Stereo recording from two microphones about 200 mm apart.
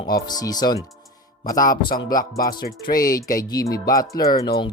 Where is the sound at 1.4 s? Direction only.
45° left (ahead or behind).